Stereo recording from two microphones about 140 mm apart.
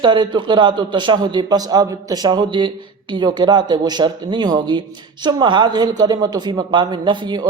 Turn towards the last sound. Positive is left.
turn(degrees=-35)  # may be behind; listen again after turning